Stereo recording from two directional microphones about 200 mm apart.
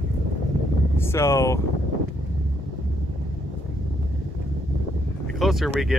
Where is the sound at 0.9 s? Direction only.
15° left (ahead or behind).